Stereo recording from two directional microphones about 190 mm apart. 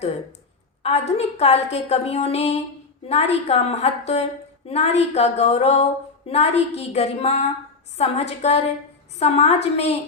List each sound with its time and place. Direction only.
0.8 s a woman's voice: 35° left (ahead or behind)